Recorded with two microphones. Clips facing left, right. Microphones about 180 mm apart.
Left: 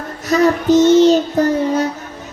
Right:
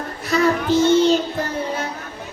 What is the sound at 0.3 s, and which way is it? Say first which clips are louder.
Child singing: left 5 dB; 40° left (ahead or behind).